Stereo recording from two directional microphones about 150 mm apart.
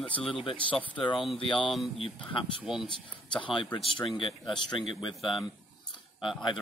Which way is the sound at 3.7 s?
35° left (ahead or behind).